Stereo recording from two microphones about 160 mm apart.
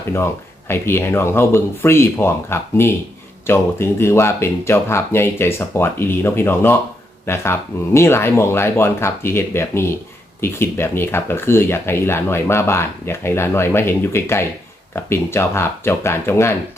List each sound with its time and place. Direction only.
0.7 s speech: 15° left (ahead or behind)